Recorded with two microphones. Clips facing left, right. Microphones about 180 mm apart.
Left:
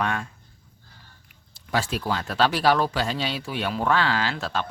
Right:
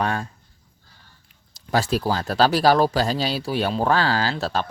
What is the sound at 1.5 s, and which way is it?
Speech, 40° right (ahead or behind).